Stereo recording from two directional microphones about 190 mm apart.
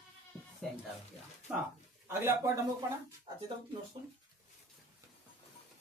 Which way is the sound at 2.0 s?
15° right (ahead or behind).